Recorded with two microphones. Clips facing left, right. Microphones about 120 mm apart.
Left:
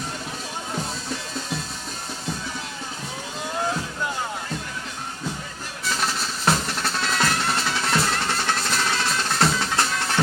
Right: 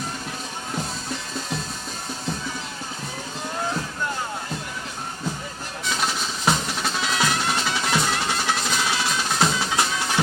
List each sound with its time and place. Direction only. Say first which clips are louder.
5.8 s drum: even; centre (ahead or behind)